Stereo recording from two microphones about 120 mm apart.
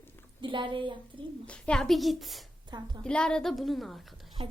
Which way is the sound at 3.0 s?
5° left (ahead or behind).